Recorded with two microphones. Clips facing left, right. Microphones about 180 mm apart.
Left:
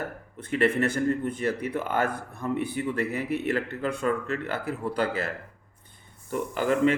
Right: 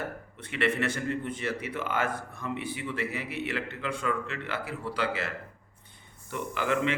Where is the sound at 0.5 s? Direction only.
40° left (ahead or behind).